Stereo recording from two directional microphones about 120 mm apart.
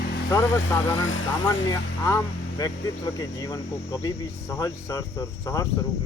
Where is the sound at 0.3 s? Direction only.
30° left (ahead or behind).